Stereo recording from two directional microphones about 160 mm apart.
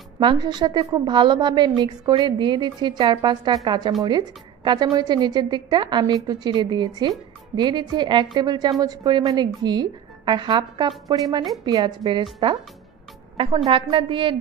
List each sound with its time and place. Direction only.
0.2 s a woman's voice: 30° right (ahead or behind)
13.7 s a woman's voice: 35° right (ahead or behind)